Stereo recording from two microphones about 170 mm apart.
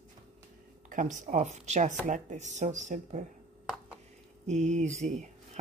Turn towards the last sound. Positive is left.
turn(degrees=-45)  # may be behind; listen again after turning